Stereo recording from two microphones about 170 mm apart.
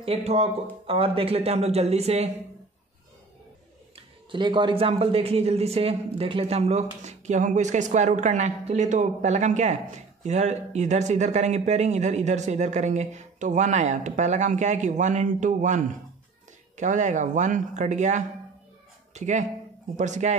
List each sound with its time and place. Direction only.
0.0 s speech: 35° right (ahead or behind)
3.9 s speech: 30° right (ahead or behind)